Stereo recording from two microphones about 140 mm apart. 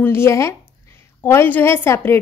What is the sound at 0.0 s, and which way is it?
A woman's voice, 20° left (ahead or behind).